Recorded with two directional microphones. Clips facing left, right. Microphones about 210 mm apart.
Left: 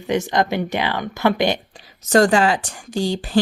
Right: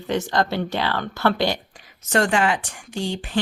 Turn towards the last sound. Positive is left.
turn(degrees=35)  # may be behind; listen again after turning